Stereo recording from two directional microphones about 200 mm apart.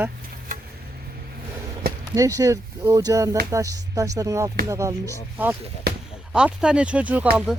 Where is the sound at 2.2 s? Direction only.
15° right (ahead or behind).